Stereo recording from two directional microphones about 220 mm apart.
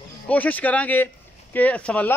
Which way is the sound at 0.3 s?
5° left (ahead or behind).